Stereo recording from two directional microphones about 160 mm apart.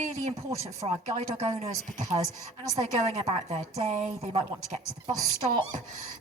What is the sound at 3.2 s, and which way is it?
A woman's voice, 40° right (ahead or behind).